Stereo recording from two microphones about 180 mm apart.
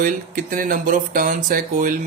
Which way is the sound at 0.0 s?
50° right (ahead or behind).